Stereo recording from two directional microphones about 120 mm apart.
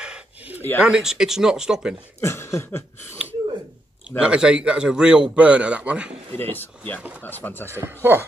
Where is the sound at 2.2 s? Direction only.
20° left (ahead or behind).